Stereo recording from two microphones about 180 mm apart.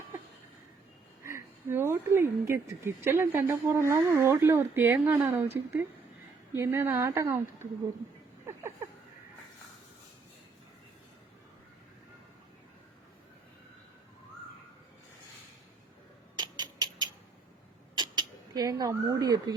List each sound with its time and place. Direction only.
1.2 s speech: 15° right (ahead or behind)
6.5 s speech: 15° right (ahead or behind)
16.3 s a sound: 25° right (ahead or behind)